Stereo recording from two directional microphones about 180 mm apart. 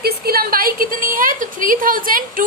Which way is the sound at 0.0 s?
55° right (ahead or behind).